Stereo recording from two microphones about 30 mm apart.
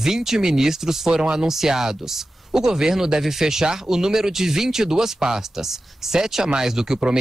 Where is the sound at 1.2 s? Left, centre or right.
Right.